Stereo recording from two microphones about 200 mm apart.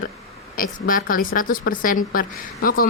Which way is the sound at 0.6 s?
45° left (ahead or behind).